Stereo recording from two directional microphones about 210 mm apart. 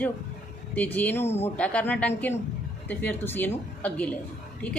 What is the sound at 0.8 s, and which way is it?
A woman's voice, 10° left (ahead or behind).